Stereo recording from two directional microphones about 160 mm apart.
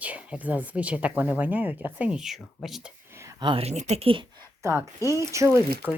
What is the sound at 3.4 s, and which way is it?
Speech, 35° right (ahead or behind).